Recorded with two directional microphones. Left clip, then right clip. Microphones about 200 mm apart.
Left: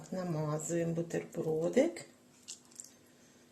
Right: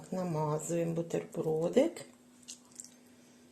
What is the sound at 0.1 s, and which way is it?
Speech, 20° right (ahead or behind).